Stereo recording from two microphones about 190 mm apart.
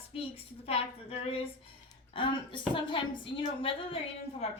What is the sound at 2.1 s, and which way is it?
A woman's voice, 25° left (ahead or behind).